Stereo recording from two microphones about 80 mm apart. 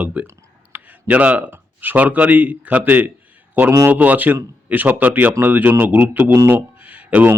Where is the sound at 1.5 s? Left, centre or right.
Right.